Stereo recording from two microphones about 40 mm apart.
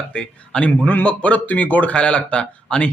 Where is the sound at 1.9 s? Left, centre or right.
Left.